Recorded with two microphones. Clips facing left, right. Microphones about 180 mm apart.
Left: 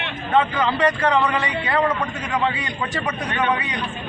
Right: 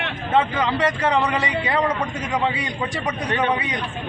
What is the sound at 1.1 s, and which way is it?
Speech, 15° right (ahead or behind).